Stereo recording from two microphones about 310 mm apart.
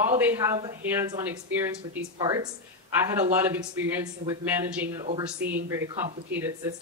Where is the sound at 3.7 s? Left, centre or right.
Centre.